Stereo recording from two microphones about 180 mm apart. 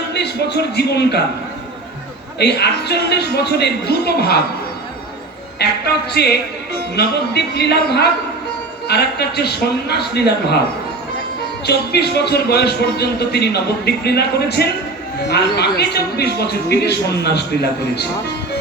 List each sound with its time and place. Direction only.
0.2 s speech: 65° left (ahead or behind)
2.4 s speech: 65° left (ahead or behind)
5.5 s speech: 65° left (ahead or behind)
11.6 s speech: 65° left (ahead or behind)